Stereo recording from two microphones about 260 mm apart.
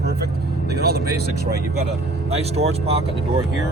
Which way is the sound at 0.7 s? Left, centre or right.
Right.